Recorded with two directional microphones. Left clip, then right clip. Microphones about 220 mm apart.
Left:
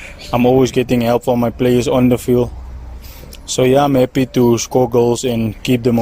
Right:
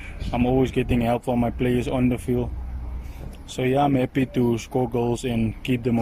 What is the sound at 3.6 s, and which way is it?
Speech, 45° left (ahead or behind).